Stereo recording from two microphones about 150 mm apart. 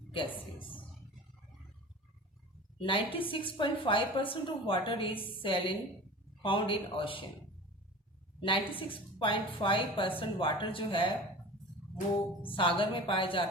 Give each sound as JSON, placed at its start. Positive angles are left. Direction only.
{"t": 0.1, "sound": "a woman's voice", "side_deg": 35}
{"t": 2.7, "sound": "a woman's voice", "side_deg": 35}
{"t": 8.4, "sound": "a woman's voice", "side_deg": 35}
{"t": 12.4, "sound": "a woman's voice", "side_deg": 35}